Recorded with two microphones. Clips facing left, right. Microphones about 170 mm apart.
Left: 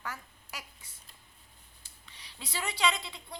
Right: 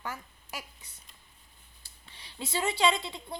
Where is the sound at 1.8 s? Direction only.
30° right (ahead or behind).